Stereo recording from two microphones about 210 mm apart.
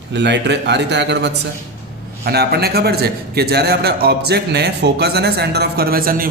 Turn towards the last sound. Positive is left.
turn(degrees=-45)  # may be behind; listen again after turning